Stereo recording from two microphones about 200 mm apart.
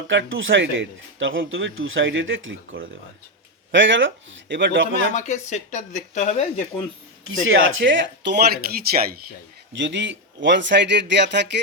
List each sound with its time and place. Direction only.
0.1 s speech: 70° right (ahead or behind)
3.7 s speech: 70° right (ahead or behind)
5.1 s speech: 35° left (ahead or behind)
7.3 s speech: 80° right; by 9.2 s 50° right (ahead or behind)
9.7 s speech: 65° right (ahead or behind)